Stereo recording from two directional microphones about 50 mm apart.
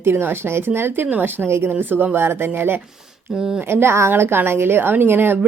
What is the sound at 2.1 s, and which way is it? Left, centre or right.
Speech, right.